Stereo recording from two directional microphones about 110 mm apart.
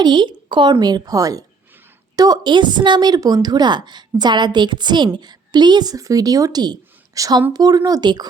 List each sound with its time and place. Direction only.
0.0 s a woman's voice: 45° right (ahead or behind)